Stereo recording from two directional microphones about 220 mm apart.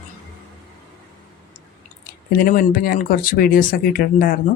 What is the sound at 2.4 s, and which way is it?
Speech, 40° left (ahead or behind).